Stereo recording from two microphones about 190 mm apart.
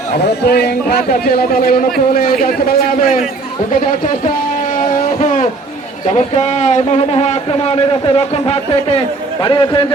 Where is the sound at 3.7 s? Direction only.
40° left (ahead or behind).